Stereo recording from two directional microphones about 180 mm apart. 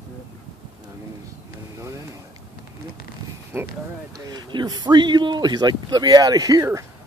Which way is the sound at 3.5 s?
15° right (ahead or behind).